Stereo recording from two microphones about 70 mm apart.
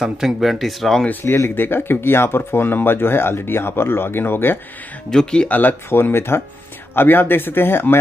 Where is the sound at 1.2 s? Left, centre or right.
Left.